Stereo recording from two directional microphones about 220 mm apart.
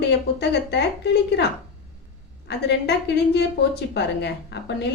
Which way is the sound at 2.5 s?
50° left (ahead or behind).